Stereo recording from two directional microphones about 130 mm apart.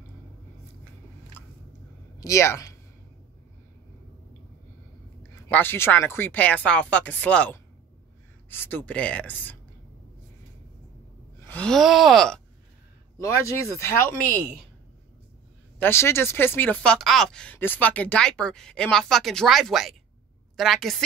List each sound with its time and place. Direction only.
2.1 s a woman's voice: 25° left (ahead or behind)
5.5 s speech: 15° left (ahead or behind)
11.4 s groan: 10° left (ahead or behind)
13.2 s speech: 20° left (ahead or behind)
15.8 s speech: 20° left (ahead or behind); by 20.0 s centre (ahead or behind)
20.5 s groan: centre (ahead or behind)